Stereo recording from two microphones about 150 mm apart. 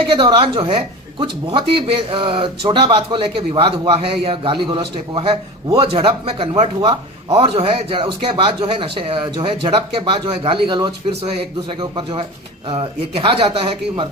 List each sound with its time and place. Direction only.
0.0 s speech: 35° right (ahead or behind)
5.8 s speech: 40° right (ahead or behind)